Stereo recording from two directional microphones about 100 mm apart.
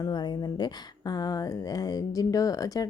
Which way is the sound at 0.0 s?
45° left (ahead or behind).